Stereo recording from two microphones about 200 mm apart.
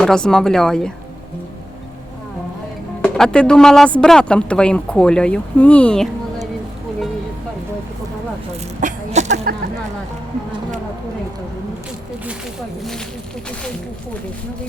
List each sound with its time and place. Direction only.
0.0 s speech: 5° left (ahead or behind)
3.0 s speech: 5° left (ahead or behind)
8.8 s a sound: 35° right (ahead or behind)